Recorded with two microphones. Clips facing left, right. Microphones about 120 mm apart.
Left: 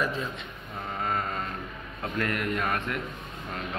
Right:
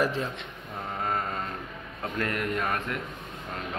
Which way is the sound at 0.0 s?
70° right (ahead or behind).